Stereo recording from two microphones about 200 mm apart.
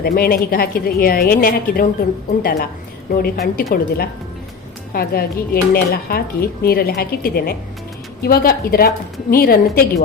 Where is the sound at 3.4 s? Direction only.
45° left (ahead or behind).